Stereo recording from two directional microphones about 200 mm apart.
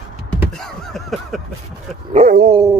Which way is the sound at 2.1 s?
35° right (ahead or behind).